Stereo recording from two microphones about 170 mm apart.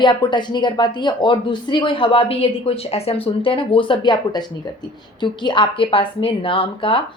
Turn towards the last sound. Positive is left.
turn(degrees=30)  # may be behind; listen again after turning